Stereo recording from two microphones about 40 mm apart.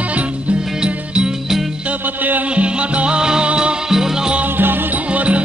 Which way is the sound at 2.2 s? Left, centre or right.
Right.